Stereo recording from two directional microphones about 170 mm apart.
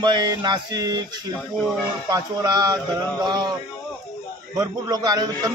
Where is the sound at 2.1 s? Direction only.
20° right (ahead or behind).